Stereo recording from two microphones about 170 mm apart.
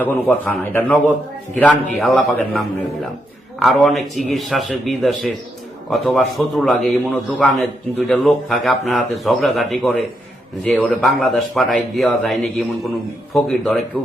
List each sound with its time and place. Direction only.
0.0 s a man's voice: 10° left (ahead or behind)